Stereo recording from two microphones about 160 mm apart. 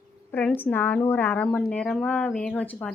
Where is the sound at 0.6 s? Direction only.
15° left (ahead or behind).